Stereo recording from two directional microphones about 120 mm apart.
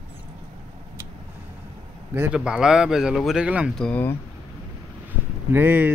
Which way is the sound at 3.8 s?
10° left (ahead or behind).